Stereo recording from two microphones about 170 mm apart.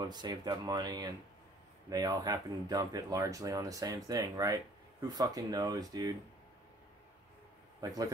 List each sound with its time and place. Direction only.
0.0 s speech: 25° right (ahead or behind)
7.8 s a man's voice: 20° right (ahead or behind)